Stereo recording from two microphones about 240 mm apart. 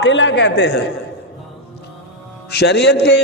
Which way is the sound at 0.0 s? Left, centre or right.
Left.